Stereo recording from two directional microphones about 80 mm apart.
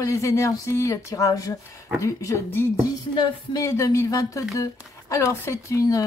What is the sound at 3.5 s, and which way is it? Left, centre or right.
Speech, left.